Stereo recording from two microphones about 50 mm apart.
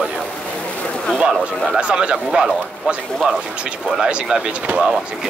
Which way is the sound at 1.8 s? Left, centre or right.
Right.